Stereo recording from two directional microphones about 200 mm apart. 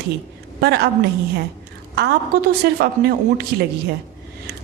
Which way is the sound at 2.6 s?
55° right (ahead or behind).